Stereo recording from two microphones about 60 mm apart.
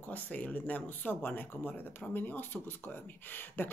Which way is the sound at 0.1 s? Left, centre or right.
Left.